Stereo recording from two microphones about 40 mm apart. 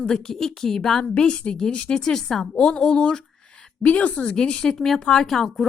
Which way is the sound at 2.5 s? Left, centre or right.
Left.